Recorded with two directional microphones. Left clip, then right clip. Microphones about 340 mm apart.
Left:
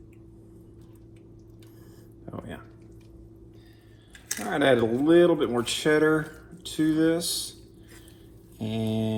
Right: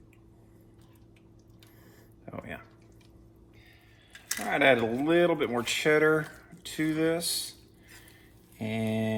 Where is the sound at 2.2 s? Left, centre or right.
Right.